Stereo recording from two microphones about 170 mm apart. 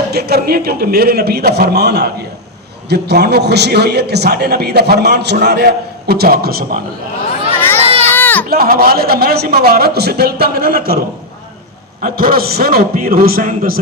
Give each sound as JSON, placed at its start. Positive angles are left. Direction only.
{"t": 0.1, "sound": "a man's voice", "side_deg": -70}
{"t": 6.1, "sound": "a man's voice", "side_deg": -65}
{"t": 7.5, "sound": "a sound", "side_deg": 10}
{"t": 7.8, "sound": "baby cry", "side_deg": -35}
{"t": 8.1, "sound": "a sound", "side_deg": 10}
{"t": 8.4, "sound": "a man's voice", "side_deg": -60}
{"t": 12.0, "sound": "a man's voice", "side_deg": -60}